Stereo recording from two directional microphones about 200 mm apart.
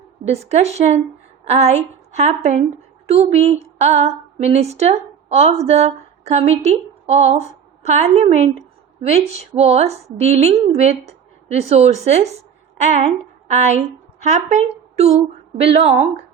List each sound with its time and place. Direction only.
0.3 s a woman's voice: 35° right (ahead or behind)
3.1 s female singing: 30° right (ahead or behind)
5.6 s a woman's voice: 30° right (ahead or behind)